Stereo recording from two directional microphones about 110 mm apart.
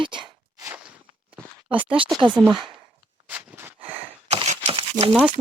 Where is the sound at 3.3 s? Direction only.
20° right (ahead or behind).